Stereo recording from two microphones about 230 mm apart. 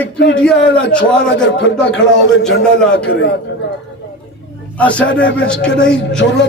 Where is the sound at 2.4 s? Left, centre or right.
Centre.